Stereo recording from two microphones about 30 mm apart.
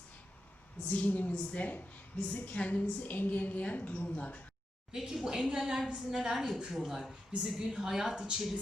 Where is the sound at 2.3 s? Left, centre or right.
Left.